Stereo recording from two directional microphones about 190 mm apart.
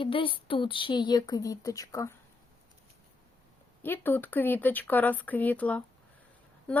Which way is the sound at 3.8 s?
10° left (ahead or behind).